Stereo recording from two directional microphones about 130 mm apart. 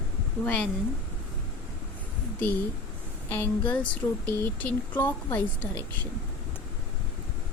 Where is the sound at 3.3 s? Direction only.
15° left (ahead or behind).